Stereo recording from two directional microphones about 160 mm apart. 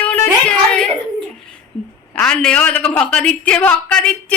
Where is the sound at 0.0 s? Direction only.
5° left (ahead or behind).